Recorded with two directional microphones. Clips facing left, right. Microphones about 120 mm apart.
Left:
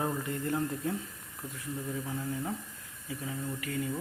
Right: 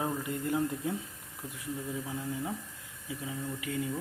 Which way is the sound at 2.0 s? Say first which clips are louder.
Left 1 dB; 5° right (ahead or behind).